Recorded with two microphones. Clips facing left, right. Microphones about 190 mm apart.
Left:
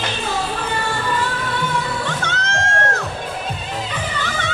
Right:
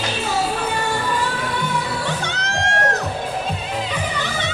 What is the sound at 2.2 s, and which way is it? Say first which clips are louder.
Music: left 1 dB; 15° right (ahead or behind).